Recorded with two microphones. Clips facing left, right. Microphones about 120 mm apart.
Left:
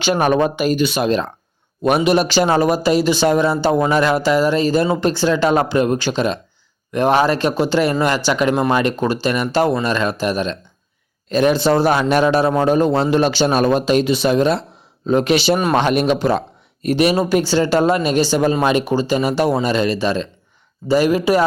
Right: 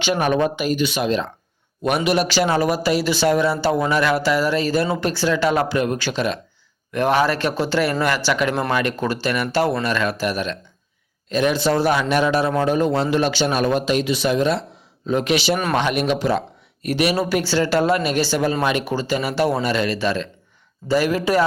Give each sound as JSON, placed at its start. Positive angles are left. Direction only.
{"t": 0.0, "sound": "a man's voice", "side_deg": 45}
{"t": 2.0, "sound": "a man's voice", "side_deg": 25}